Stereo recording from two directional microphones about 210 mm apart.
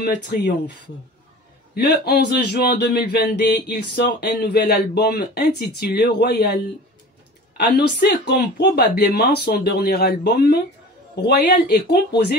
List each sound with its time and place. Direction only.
0.0 s speech: 50° left (ahead or behind)
1.8 s speech: 50° left (ahead or behind)